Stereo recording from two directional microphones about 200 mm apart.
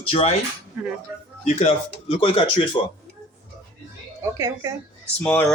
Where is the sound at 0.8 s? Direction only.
Centre (ahead or behind).